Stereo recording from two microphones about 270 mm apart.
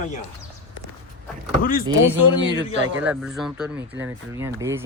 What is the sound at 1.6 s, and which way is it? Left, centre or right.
Speech, left.